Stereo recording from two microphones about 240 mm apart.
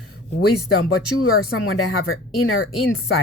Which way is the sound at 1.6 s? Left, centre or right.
Left.